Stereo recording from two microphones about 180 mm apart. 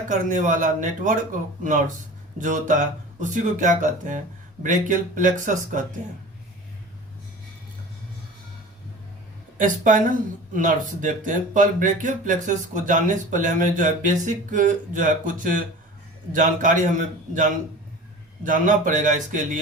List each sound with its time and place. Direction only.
0.1 s speech: 45° right (ahead or behind)
9.6 s speech: 45° right (ahead or behind)